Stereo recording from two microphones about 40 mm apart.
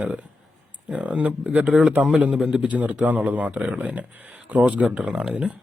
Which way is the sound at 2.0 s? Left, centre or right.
Right.